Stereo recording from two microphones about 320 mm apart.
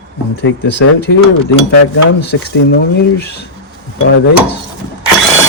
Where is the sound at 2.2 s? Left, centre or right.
Left.